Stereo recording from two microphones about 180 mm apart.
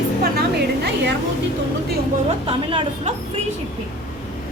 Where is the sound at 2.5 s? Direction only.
30° right (ahead or behind).